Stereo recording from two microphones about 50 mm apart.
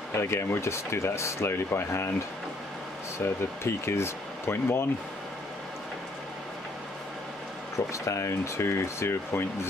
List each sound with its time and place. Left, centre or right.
0.1 s speech: left
3.2 s speech: left
7.9 s speech: left